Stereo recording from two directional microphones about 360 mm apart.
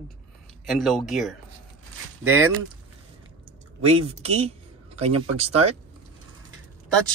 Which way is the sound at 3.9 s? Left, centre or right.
Centre.